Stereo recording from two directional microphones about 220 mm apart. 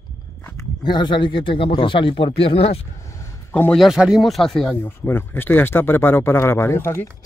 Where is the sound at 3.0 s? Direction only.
15° left (ahead or behind).